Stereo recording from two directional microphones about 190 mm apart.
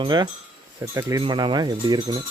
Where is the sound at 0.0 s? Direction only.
25° right (ahead or behind).